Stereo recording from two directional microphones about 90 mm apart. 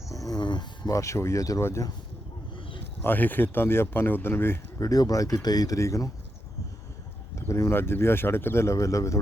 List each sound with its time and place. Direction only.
0.1 s a sound: 40° left (ahead or behind)
0.3 s speech: 55° left (ahead or behind)
0.9 s speech: 35° left (ahead or behind)
3.0 s speech: 20° left (ahead or behind)
4.8 s speech: 40° left (ahead or behind)
7.3 s speech: 35° left (ahead or behind)